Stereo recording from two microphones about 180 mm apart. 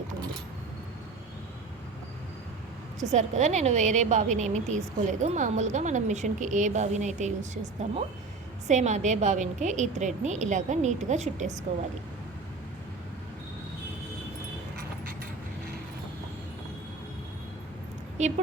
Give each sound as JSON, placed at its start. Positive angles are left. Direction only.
{"t": 3.1, "sound": "a woman's voice", "side_deg": -40}
{"t": 18.2, "sound": "a woman's voice", "side_deg": -40}